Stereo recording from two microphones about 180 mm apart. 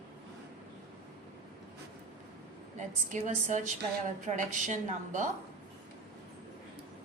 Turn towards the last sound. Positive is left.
turn(degrees=-45)  # may be behind; listen again after turning